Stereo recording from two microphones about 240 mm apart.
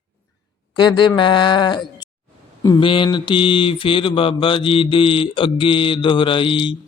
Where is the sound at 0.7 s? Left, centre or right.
Centre.